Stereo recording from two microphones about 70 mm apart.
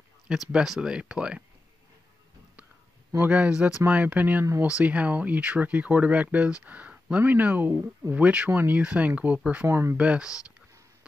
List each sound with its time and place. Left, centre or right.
0.3 s speech: centre
3.2 s speech: right
8.1 s speech: centre
8.5 s speech: right
9.7 s speech: right
9.9 s speech: centre